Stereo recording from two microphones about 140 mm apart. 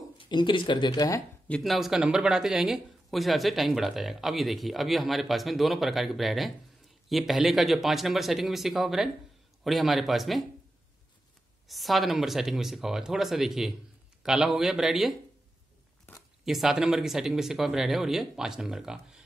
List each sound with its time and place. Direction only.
0.2 s speech: 35° left (ahead or behind)
1.5 s speech: centre (ahead or behind)
11.6 s speech: centre (ahead or behind)
16.4 s speech: centre (ahead or behind)